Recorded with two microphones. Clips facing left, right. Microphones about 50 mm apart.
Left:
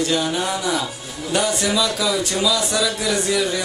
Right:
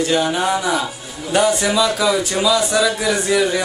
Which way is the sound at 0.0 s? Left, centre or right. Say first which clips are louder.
Right 3 dB; centre.